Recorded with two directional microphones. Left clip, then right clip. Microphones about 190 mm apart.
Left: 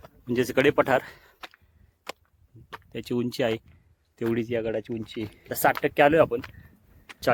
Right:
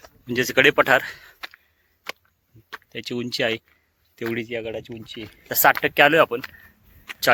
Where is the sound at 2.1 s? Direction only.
5° right (ahead or behind).